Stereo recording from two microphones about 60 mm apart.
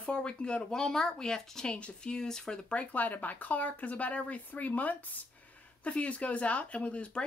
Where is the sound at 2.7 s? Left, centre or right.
Left.